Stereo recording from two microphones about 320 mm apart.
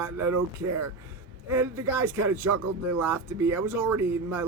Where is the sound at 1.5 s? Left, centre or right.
Centre.